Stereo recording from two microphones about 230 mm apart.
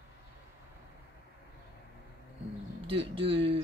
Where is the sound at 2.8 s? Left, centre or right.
Right.